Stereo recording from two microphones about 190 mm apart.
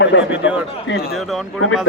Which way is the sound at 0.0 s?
70° left (ahead or behind).